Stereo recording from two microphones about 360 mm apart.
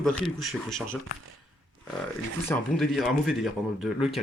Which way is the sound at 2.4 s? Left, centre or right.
Centre.